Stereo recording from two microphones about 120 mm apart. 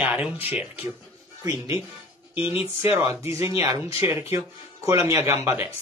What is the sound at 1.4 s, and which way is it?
Speech, 25° right (ahead or behind).